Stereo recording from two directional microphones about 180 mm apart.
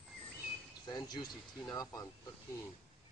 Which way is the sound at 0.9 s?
20° left (ahead or behind).